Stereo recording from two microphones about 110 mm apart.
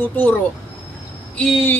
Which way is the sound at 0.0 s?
20° left (ahead or behind).